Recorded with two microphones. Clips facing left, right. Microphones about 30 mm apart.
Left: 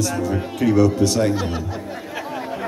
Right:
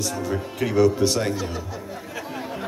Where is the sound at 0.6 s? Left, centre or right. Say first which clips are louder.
Left 3 dB; centre.